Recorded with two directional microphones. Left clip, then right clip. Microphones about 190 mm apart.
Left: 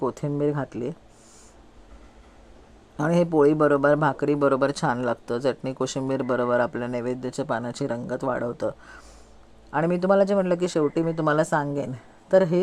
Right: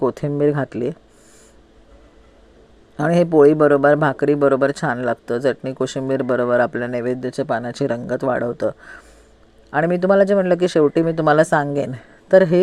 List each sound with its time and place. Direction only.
0.0 s speech: 20° right (ahead or behind)
3.0 s speech: 15° right (ahead or behind)